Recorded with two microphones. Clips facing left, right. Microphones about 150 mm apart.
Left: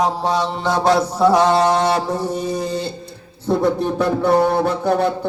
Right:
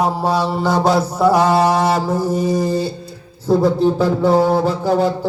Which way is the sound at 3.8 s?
65° left (ahead or behind).